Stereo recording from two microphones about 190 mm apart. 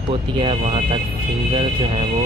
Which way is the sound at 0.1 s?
30° right (ahead or behind).